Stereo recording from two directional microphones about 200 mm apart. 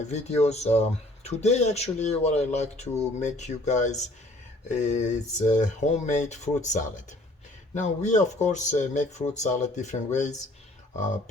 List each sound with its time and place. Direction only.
0.0 s speech: 35° left (ahead or behind)